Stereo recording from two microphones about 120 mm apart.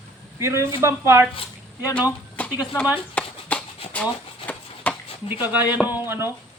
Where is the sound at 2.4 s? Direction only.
10° left (ahead or behind).